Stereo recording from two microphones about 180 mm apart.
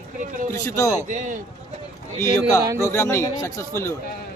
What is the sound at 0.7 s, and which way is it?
Speech, 20° left (ahead or behind).